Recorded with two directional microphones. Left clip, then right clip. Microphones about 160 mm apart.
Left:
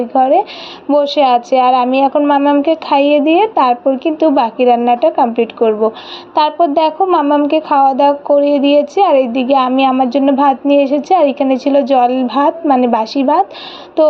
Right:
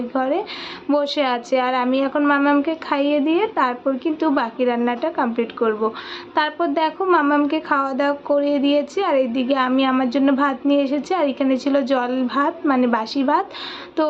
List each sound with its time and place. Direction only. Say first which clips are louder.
0.1 s speech: left 11 dB; 10° left (ahead or behind)
6.3 s speech: left 9 dB; 10° left (ahead or behind)